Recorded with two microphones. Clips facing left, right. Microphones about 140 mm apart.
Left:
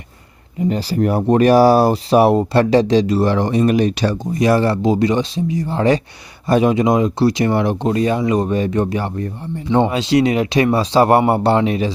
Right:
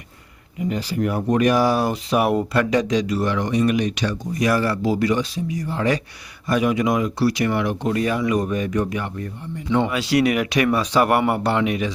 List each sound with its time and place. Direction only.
0.7 s speech: 35° left (ahead or behind)